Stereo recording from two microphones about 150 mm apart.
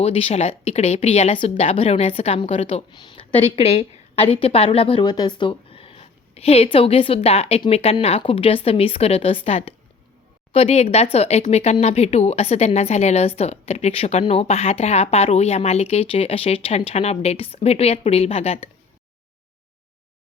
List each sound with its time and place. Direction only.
0.0 s speech: 40° left (ahead or behind)